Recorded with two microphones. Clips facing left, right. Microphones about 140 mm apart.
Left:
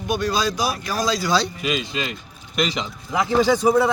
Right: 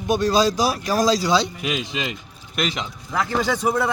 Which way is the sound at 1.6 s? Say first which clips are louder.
Left 1 dB; 15° right (ahead or behind).